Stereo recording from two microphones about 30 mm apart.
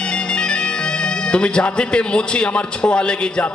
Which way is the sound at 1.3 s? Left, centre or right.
Left.